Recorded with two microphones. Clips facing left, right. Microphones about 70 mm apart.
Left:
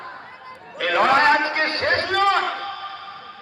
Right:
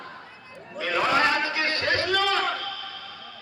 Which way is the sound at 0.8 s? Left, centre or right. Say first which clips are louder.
Left 6 dB; left.